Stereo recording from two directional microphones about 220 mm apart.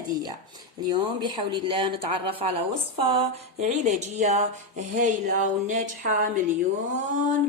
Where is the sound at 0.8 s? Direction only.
20° right (ahead or behind).